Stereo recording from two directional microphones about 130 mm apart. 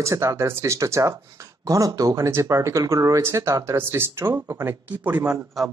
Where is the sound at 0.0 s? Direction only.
25° right (ahead or behind).